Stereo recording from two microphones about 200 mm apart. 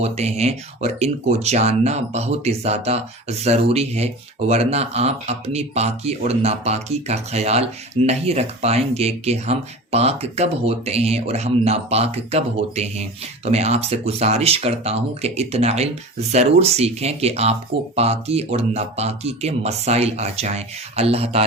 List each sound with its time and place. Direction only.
0.0 s speech: 30° right (ahead or behind)